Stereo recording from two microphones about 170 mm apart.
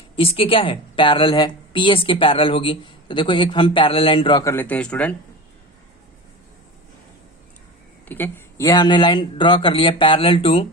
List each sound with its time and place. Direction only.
0.2 s a woman's voice: 30° left (ahead or behind)
4.5 s speech: 10° left (ahead or behind)
8.0 s speech: 10° left (ahead or behind); by 10.7 s 35° left (ahead or behind)